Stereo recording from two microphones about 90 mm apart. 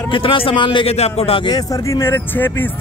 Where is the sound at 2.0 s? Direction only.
25° left (ahead or behind).